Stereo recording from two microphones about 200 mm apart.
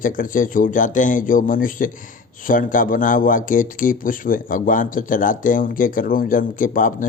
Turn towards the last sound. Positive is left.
turn(degrees=40)  # may be behind; listen again after turning